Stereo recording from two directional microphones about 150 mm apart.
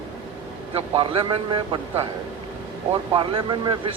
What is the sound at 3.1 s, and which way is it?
Speech, 35° right (ahead or behind).